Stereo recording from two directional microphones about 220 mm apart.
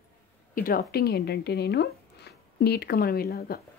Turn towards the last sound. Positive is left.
turn(degrees=45)  # may be behind; listen again after turning